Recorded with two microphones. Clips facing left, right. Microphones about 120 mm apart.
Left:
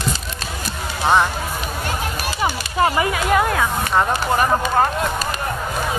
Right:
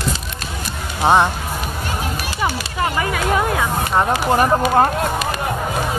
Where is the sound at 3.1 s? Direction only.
Centre (ahead or behind).